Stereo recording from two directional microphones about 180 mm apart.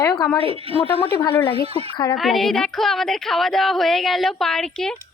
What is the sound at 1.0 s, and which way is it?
Speech, 25° left (ahead or behind).